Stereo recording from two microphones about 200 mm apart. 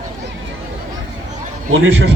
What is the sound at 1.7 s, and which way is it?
Speech, 90° right.